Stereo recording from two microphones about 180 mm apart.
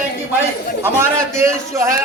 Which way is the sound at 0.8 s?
15° right (ahead or behind).